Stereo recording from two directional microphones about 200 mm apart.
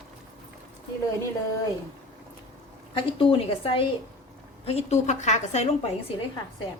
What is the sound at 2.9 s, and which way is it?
A woman's voice, 25° left (ahead or behind).